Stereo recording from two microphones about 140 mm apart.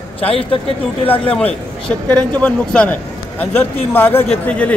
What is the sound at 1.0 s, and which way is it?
A man's voice, 10° left (ahead or behind).